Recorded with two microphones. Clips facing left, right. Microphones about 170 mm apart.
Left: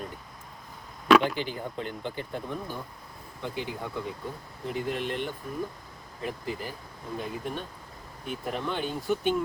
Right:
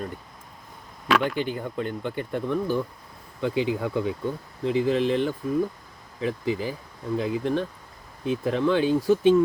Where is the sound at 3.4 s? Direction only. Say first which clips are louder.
Right 10 dB; 90° right.